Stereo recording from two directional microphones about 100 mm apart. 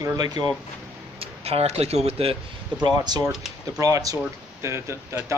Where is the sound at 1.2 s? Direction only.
90° right.